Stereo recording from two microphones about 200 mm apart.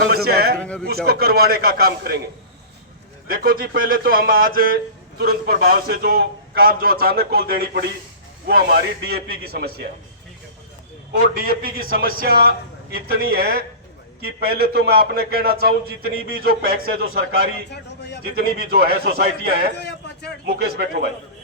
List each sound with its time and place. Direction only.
0.1 s a man's voice: 50° right (ahead or behind)
0.6 s speech: 5° left (ahead or behind)
1.0 s speech: 50° right (ahead or behind)
3.2 s speech: 45° right (ahead or behind)
11.1 s speech: 50° right (ahead or behind)